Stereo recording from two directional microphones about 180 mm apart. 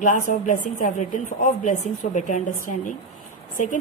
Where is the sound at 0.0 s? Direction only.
45° left (ahead or behind).